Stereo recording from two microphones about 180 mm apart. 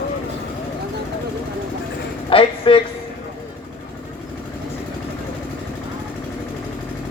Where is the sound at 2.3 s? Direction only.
30° left (ahead or behind).